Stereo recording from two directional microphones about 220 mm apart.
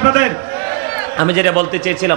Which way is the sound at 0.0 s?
15° right (ahead or behind).